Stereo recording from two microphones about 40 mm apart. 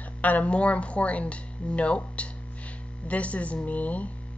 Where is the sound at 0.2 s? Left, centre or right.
Left.